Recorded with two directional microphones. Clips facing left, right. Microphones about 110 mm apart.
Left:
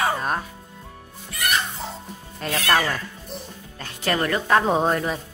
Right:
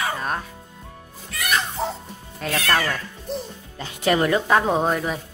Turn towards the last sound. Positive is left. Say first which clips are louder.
# even
turn(degrees=0)  # may be behind; listen again after turning